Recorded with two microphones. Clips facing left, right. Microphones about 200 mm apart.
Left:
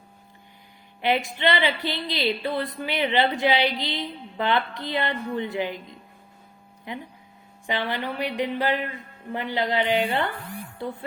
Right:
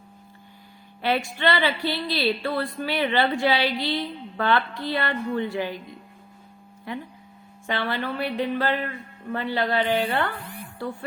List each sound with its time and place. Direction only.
1.0 s a woman's voice: 20° left (ahead or behind)
6.9 s a woman's voice: 20° left (ahead or behind)